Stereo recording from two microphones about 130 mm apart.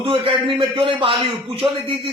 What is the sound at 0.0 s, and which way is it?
A man's voice, 45° right (ahead or behind).